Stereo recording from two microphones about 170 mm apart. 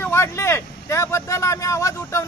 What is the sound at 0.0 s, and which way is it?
Speech, 15° left (ahead or behind).